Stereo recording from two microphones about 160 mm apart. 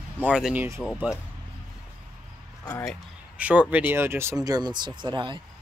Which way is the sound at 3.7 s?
10° right (ahead or behind).